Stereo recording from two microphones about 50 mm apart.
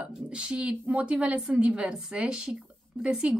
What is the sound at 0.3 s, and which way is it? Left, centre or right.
Speech, centre.